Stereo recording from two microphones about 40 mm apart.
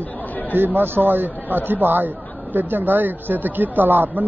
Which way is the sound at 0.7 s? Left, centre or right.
Right.